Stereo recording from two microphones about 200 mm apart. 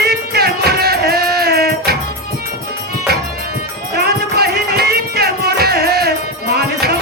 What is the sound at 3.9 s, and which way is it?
Music, 50° right (ahead or behind).